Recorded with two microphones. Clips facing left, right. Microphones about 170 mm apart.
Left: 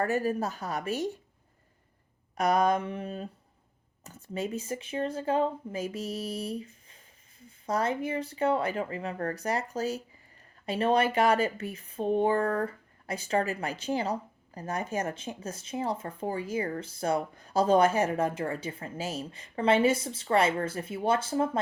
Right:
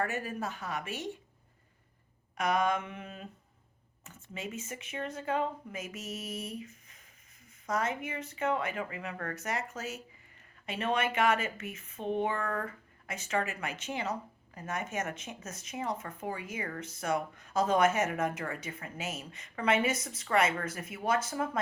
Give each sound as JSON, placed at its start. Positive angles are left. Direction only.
{"t": 0.0, "sound": "speech", "side_deg": 35}
{"t": 2.3, "sound": "speech", "side_deg": 35}